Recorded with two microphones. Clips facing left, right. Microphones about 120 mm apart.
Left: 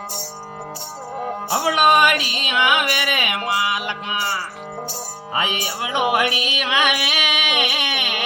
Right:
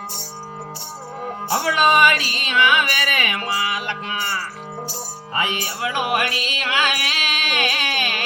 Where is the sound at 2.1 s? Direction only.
15° left (ahead or behind).